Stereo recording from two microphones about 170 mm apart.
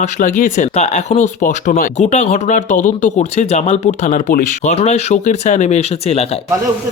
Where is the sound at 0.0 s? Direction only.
45° left (ahead or behind).